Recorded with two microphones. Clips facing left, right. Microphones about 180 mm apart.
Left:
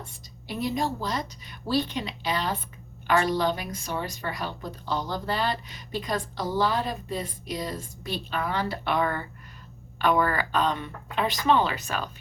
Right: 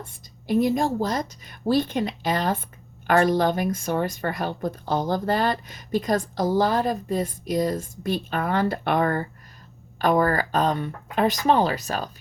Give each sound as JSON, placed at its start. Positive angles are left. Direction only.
{"t": 0.0, "sound": "speech", "side_deg": -50}